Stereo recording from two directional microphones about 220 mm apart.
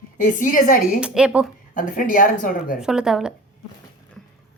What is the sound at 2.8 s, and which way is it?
Speech, 5° right (ahead or behind).